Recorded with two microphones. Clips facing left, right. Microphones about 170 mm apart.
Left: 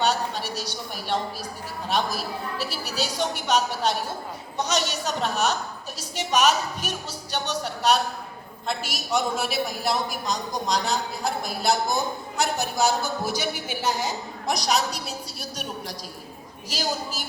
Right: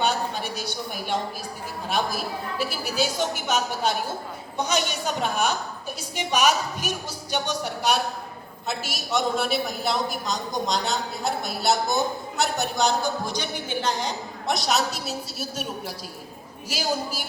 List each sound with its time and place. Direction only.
0.5 s a woman's voice: 10° right (ahead or behind)
2.0 s a woman's voice: 50° right (ahead or behind)
3.4 s a woman's voice: 10° right (ahead or behind)
16.6 s a woman's voice: 10° right (ahead or behind)